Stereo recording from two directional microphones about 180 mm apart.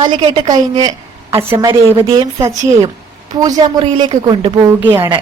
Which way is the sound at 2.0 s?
30° right (ahead or behind).